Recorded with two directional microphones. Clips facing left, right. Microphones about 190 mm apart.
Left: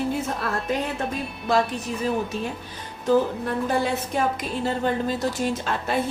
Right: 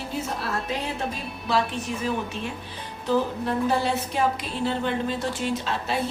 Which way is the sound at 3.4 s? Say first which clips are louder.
Even; 50° left (ahead or behind).